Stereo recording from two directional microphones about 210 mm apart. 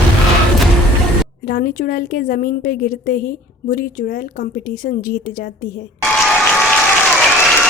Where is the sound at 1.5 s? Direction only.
45° left (ahead or behind).